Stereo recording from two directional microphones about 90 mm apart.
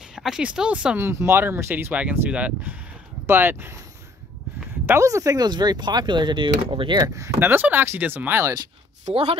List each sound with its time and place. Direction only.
0.1 s speech: 5° right (ahead or behind)
0.9 s speech: 25° right (ahead or behind)
5.0 s speech: 40° right (ahead or behind)
5.5 s speech: 55° right (ahead or behind)
7.0 s speech: 40° right (ahead or behind)
7.3 s speech: 20° right (ahead or behind)
9.1 s speech: 90° right